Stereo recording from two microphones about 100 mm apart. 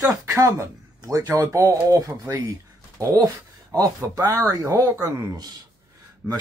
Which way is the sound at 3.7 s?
35° right (ahead or behind).